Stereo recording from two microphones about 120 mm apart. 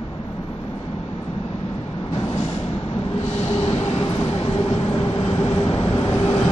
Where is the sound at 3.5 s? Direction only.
40° left (ahead or behind).